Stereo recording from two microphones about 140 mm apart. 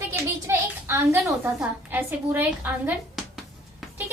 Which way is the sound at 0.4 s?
15° right (ahead or behind).